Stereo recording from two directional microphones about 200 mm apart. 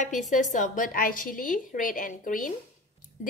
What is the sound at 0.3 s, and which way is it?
A woman's voice, 40° left (ahead or behind).